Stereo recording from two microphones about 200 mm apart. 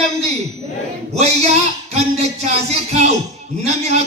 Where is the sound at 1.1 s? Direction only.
35° right (ahead or behind).